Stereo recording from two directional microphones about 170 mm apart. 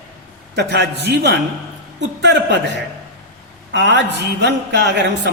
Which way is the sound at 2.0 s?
90° right.